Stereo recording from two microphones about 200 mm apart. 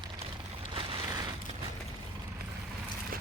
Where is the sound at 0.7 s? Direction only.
25° right (ahead or behind).